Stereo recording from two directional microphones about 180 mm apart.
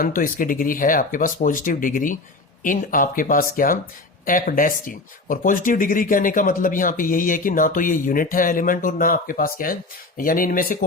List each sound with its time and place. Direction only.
0.0 s speech: 50° left (ahead or behind)